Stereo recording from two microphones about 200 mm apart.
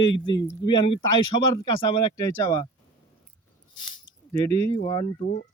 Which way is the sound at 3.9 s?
25° left (ahead or behind).